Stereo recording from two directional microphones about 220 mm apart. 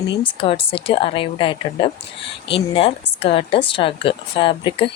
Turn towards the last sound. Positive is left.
turn(degrees=20)  # may be behind; listen again after turning